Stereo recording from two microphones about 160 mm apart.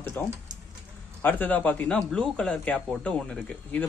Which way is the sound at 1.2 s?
10° left (ahead or behind).